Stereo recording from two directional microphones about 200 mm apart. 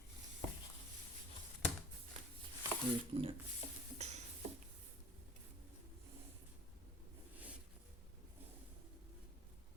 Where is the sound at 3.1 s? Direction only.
30° right (ahead or behind).